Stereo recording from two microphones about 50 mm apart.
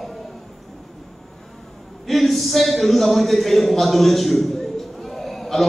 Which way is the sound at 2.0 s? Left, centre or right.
Centre.